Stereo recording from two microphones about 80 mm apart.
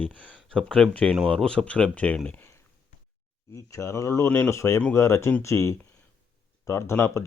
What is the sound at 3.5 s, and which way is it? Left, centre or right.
Speech, left.